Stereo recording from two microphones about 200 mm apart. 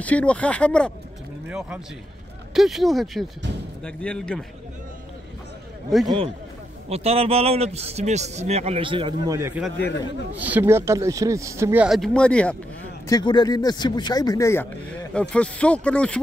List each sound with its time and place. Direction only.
0.0 s speech: 5° left (ahead or behind)
6.0 s a man's voice: 25° right (ahead or behind); by 12.5 s 5° left (ahead or behind)
13.1 s speech: 20° left (ahead or behind); by 16.2 s 5° left (ahead or behind)